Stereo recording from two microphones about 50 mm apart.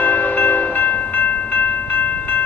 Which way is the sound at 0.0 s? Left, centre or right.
Left.